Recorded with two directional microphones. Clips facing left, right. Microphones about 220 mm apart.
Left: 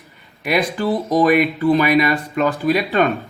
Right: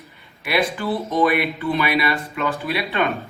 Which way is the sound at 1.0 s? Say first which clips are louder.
Left 5 dB; 40° left (ahead or behind).